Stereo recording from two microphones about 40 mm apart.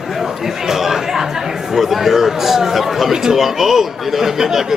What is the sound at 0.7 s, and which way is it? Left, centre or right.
Chatter, centre.